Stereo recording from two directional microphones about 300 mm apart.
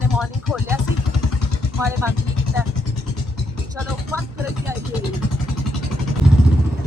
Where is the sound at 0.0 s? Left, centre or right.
Centre.